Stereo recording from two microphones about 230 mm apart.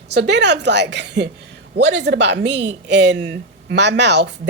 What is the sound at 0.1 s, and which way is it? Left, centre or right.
Speech, right.